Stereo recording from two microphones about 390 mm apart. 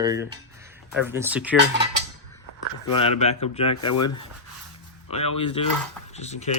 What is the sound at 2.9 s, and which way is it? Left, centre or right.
Speech, centre.